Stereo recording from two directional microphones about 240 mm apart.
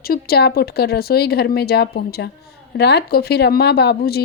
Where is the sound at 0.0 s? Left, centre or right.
Left.